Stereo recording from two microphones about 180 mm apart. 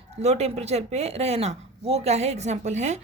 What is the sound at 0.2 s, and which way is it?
Speech, 35° right (ahead or behind).